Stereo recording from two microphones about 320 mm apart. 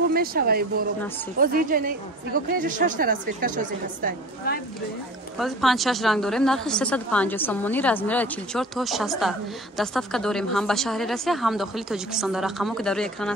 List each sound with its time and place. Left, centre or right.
0.1 s a woman's voice: right
5.4 s a woman's voice: centre